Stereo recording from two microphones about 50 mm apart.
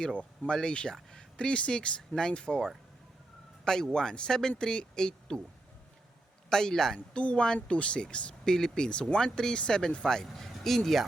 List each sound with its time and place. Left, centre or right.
0.0 s speech: left
6.5 s speech: centre